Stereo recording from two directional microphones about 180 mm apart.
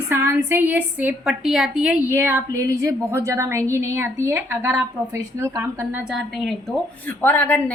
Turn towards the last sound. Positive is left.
turn(degrees=10)  # may be behind; listen again after turning